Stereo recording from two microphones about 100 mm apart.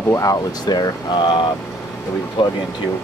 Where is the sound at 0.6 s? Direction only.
45° left (ahead or behind).